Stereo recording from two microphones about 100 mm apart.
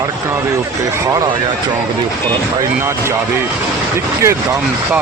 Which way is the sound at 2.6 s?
25° right (ahead or behind).